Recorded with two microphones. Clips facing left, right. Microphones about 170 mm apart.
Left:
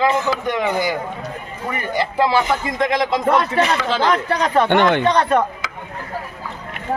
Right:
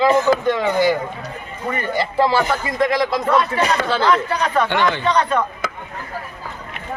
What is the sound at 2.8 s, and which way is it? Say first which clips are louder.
Speech: right 2 dB; 20° left (ahead or behind).